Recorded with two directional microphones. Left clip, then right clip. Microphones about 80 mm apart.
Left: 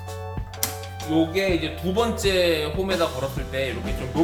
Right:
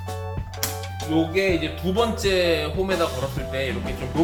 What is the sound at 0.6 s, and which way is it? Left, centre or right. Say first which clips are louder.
Speech: right 1 dB; centre.